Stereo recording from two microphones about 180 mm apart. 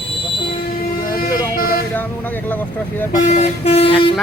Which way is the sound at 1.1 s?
55° left (ahead or behind).